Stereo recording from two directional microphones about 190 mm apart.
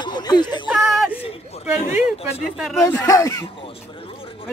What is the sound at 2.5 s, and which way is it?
Speech, centre (ahead or behind).